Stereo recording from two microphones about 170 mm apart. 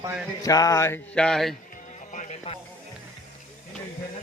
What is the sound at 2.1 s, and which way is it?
Music, 50° left (ahead or behind).